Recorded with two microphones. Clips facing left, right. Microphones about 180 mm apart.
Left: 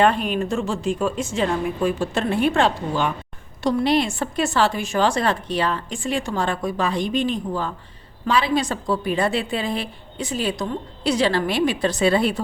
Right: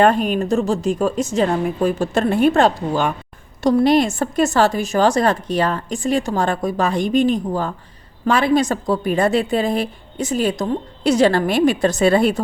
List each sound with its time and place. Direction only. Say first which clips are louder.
0.0 s a woman's voice: right 4 dB; 45° right (ahead or behind)